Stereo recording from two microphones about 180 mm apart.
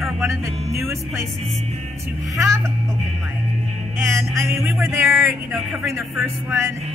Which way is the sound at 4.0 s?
15° right (ahead or behind).